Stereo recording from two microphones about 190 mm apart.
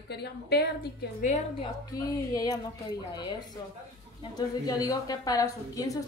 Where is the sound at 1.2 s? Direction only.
40° left (ahead or behind).